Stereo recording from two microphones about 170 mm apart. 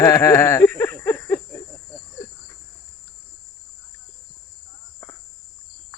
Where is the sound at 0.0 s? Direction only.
20° left (ahead or behind).